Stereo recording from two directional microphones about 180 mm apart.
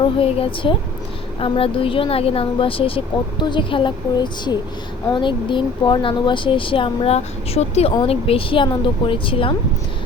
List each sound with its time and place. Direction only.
0.0 s speech: 30° left (ahead or behind)